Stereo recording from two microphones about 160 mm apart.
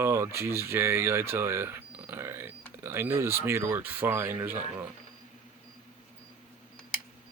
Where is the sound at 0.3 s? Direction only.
15° right (ahead or behind).